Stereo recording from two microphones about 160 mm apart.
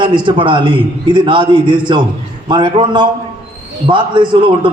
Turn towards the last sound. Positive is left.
turn(degrees=-30)  # may be behind; listen again after turning